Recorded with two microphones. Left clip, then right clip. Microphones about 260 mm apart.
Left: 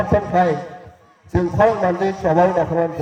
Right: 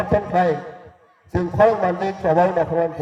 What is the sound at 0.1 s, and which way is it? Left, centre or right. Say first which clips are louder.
A man's voice: left 1 dB; right.